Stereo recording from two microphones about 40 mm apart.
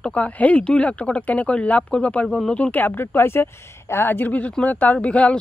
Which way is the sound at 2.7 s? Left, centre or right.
Left.